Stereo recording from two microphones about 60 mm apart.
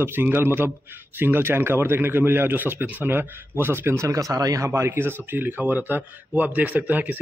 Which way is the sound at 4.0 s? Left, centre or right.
Right.